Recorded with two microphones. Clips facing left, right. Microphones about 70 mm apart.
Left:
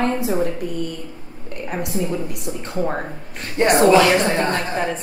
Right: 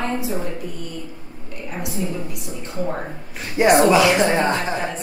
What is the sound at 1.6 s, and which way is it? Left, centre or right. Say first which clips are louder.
Speech: left 3 dB; left.